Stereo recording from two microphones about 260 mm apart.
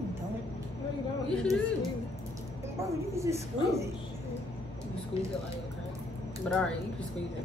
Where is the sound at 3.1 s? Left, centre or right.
Centre.